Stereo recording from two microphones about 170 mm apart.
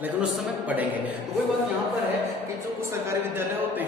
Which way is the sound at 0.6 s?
10° right (ahead or behind).